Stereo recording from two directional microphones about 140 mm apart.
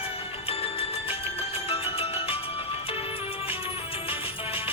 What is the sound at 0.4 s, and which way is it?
Music, 45° left (ahead or behind).